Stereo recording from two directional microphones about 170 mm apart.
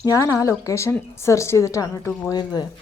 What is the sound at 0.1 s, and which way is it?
A woman's voice, 20° left (ahead or behind).